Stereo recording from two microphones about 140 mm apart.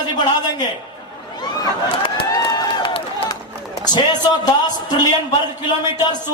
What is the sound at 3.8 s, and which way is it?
A man's voice, 30° left (ahead or behind).